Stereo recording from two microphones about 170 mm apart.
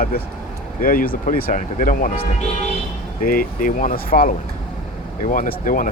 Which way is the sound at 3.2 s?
55° left (ahead or behind).